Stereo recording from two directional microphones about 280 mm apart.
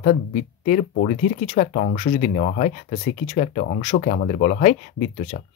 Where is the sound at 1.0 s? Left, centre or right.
Left.